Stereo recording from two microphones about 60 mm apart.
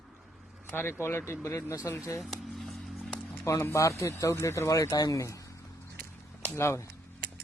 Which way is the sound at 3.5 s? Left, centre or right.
Left.